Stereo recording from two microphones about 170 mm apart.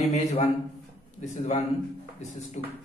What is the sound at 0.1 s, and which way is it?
A man's voice, 40° left (ahead or behind).